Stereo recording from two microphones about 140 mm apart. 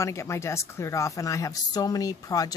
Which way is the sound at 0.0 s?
20° left (ahead or behind).